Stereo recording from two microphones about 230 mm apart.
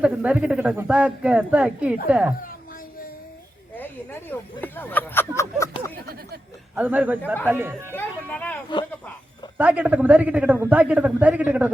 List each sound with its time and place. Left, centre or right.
0.0 s speech: centre
3.8 s speech: centre
6.0 s a sound: right
6.7 s a man's voice: centre
7.9 s a sound: centre
9.6 s a man's voice: centre